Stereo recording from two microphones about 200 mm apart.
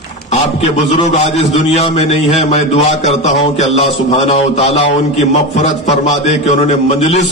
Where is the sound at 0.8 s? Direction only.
35° left (ahead or behind).